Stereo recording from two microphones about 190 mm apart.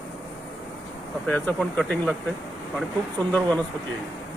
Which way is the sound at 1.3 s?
10° left (ahead or behind).